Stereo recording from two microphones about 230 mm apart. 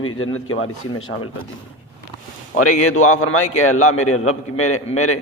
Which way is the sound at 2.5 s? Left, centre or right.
Left.